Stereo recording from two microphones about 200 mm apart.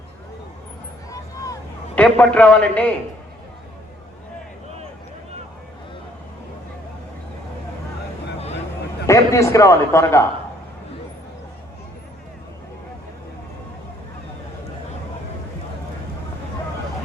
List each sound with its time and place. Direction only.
1.1 s a sound: 15° left (ahead or behind)
2.0 s a man's voice: 5° left (ahead or behind)
9.0 s a man's voice: 15° left (ahead or behind)